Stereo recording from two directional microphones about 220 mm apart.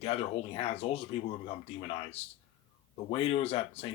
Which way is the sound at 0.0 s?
25° left (ahead or behind).